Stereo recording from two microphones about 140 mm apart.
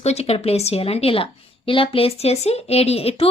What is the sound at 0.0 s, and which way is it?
A woman's voice, 50° left (ahead or behind).